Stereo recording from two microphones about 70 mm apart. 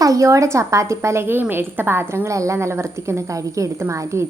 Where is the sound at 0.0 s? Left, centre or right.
Right.